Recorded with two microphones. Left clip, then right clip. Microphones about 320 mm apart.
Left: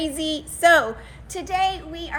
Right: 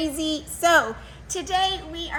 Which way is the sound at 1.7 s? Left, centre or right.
Right.